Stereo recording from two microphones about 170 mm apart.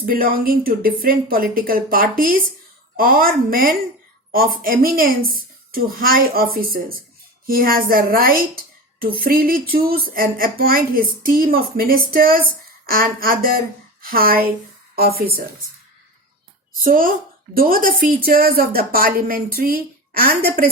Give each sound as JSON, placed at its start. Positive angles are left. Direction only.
{"t": 0.0, "sound": "a woman's voice", "side_deg": -55}
{"t": 16.8, "sound": "a woman's voice", "side_deg": -55}